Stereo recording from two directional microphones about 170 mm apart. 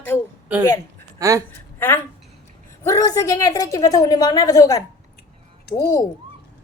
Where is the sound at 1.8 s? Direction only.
10° left (ahead or behind).